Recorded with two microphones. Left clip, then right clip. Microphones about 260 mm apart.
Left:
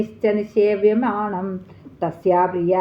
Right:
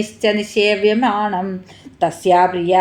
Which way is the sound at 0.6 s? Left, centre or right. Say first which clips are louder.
Right 1 dB; right.